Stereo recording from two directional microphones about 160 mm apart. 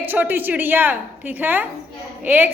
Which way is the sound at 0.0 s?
10° right (ahead or behind).